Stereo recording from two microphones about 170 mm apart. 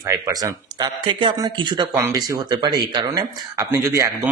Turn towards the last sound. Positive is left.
turn(degrees=-20)  # may be behind; listen again after turning